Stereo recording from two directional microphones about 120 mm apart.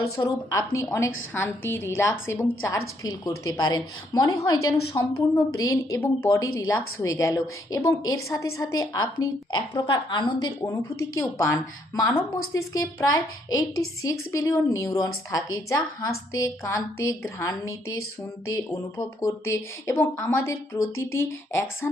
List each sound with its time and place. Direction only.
0.2 s a woman's voice: 35° left (ahead or behind)
0.9 s a woman's voice: 20° left (ahead or behind); by 10.5 s 40° left (ahead or behind)
10.7 s a woman's voice: 25° left (ahead or behind)